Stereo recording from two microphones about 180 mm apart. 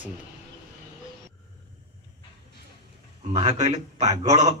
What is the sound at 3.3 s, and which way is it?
A man's voice, 35° right (ahead or behind).